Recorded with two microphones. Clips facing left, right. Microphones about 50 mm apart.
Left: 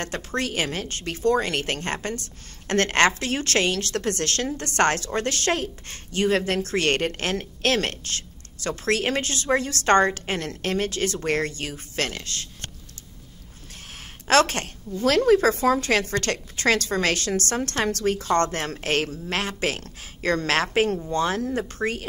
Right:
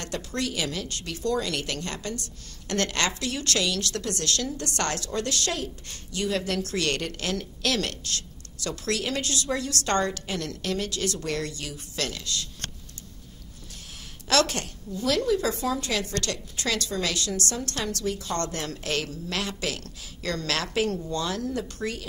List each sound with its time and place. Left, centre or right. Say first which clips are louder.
0.0 s a woman's voice: left 3 dB; left
14.2 s a woman's voice: left 5 dB; left